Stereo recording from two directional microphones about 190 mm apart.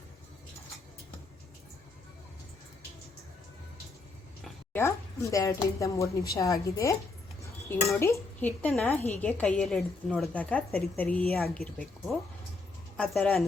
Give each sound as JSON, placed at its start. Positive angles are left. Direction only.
{"t": 4.7, "sound": "a woman's voice", "side_deg": 15}
{"t": 7.9, "sound": "a woman's voice", "side_deg": 15}